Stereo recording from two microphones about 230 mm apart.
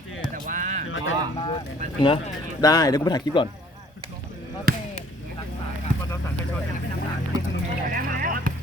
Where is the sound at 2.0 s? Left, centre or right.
Left.